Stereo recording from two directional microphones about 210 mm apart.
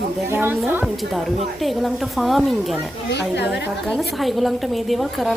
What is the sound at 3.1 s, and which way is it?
Speech, 55° left (ahead or behind).